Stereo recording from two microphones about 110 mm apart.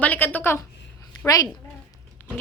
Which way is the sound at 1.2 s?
35° left (ahead or behind).